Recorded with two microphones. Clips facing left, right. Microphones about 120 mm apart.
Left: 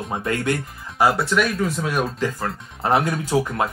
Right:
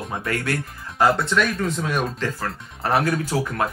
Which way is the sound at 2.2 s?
15° left (ahead or behind).